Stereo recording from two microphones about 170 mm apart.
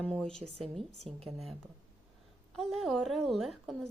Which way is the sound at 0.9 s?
35° right (ahead or behind).